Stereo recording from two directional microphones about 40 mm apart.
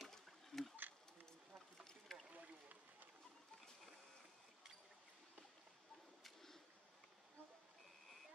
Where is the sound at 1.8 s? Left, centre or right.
Centre.